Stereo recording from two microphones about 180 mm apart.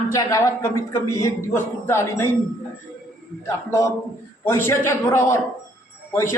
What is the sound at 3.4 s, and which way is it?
A man's voice, 15° left (ahead or behind).